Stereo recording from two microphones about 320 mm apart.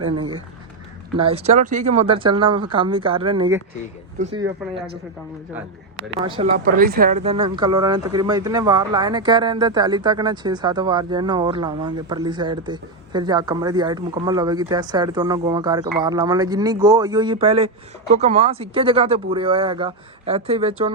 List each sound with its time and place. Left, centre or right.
1.1 s speech: centre
6.2 s speech: centre